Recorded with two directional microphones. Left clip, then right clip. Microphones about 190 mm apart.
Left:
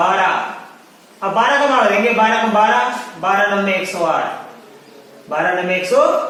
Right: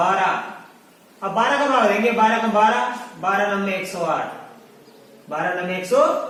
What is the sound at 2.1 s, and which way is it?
Speech, 15° left (ahead or behind).